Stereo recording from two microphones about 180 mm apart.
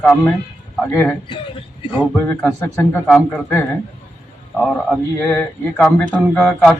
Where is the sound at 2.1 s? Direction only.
15° left (ahead or behind).